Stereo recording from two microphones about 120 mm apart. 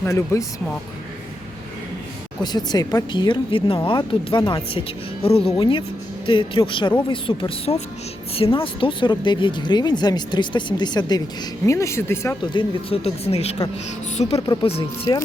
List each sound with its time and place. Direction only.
0.0 s speech: 25° left (ahead or behind)
2.4 s speech: 35° left (ahead or behind); by 5.5 s 55° left (ahead or behind)
5.5 s speech: 40° left (ahead or behind)
11.6 s speech: 25° left (ahead or behind)
12.4 s speech: 40° left (ahead or behind)
13.0 s speech: 60° left (ahead or behind)